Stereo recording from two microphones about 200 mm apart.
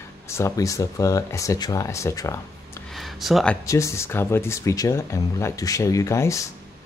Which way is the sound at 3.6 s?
15° left (ahead or behind).